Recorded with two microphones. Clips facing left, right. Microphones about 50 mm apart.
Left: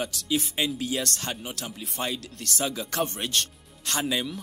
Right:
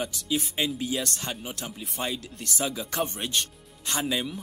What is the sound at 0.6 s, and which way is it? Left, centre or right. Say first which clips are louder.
Speech: right 1 dB; centre.